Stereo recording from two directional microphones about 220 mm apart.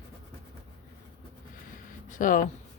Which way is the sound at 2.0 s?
35° left (ahead or behind).